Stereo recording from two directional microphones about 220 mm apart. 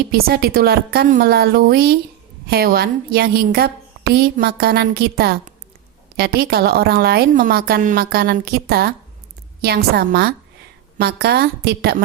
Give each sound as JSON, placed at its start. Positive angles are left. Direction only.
{"t": 0.1, "sound": "a woman's voice", "side_deg": -45}